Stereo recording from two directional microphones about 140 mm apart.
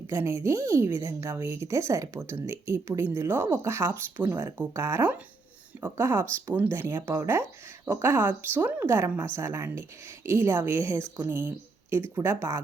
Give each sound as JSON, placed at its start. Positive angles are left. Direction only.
{"t": 0.1, "sound": "speech", "side_deg": -20}